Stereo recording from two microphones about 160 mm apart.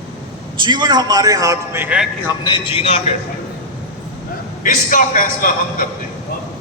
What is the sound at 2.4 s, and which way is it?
Speech, 30° left (ahead or behind).